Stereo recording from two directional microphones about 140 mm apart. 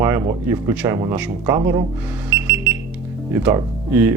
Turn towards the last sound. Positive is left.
turn(degrees=-15)  # may be behind; listen again after turning